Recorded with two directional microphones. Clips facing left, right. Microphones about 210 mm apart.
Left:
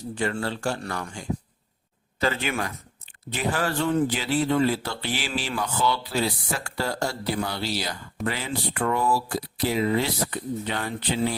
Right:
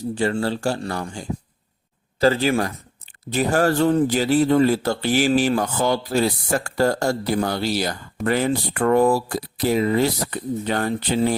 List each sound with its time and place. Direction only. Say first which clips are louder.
0.2 s speech: right 5 dB; 35° right (ahead or behind)